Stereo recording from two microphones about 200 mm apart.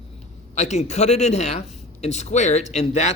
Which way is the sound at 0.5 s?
35° left (ahead or behind).